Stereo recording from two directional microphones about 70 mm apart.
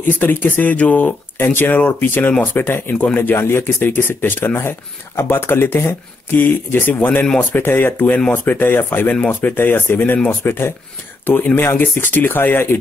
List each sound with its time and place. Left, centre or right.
0.1 s speech: left